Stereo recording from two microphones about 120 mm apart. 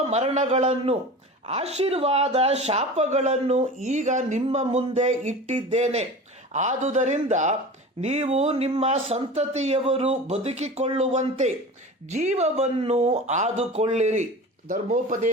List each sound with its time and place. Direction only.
0.0 s speech: 65° right (ahead or behind)
6.5 s speech: 85° right
8.0 s speech: 65° right (ahead or behind)
14.8 s speech: 90° right